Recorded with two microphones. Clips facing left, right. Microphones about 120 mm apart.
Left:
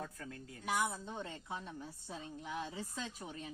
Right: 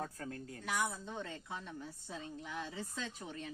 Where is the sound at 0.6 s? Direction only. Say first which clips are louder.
Left 2 dB; 15° left (ahead or behind).